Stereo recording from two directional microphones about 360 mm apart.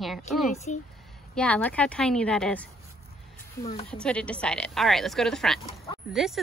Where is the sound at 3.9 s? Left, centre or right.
Centre.